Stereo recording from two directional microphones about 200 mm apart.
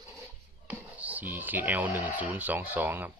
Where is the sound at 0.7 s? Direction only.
10° right (ahead or behind).